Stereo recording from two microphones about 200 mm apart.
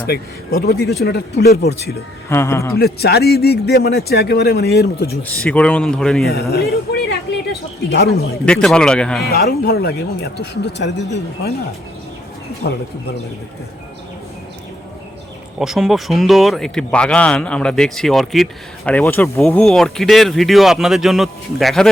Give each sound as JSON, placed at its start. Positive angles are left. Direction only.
{"t": 0.6, "sound": "speech", "side_deg": 50}
{"t": 2.3, "sound": "speech", "side_deg": 15}
{"t": 2.7, "sound": "speech", "side_deg": 50}
{"t": 5.3, "sound": "speech", "side_deg": 5}
{"t": 6.5, "sound": "speech", "side_deg": 50}
{"t": 8.4, "sound": "speech", "side_deg": 5}
{"t": 9.3, "sound": "speech", "side_deg": 50}
{"t": 15.5, "sound": "speech", "side_deg": 0}